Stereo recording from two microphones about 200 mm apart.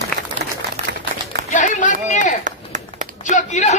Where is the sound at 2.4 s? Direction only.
40° right (ahead or behind).